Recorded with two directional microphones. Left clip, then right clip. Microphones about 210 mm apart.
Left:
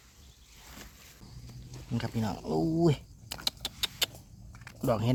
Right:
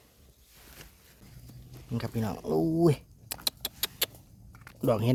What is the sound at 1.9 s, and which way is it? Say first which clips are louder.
Speech: even; 35° right (ahead or behind).